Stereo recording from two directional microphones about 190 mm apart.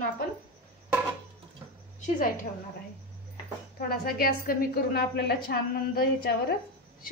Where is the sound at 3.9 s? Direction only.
50° left (ahead or behind).